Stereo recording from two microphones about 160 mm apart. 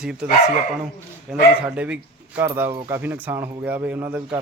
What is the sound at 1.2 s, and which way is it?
Speech, 5° right (ahead or behind).